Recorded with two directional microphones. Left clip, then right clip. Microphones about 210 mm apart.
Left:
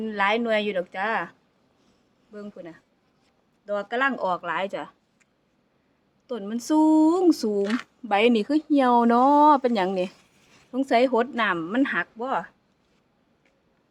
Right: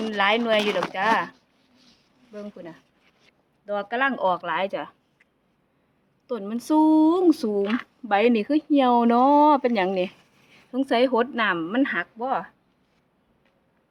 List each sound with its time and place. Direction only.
0.1 s speech: centre (ahead or behind)
2.3 s speech: centre (ahead or behind)
6.2 s speech: centre (ahead or behind)
7.6 s speech: 25° left (ahead or behind)
8.0 s speech: 10° left (ahead or behind)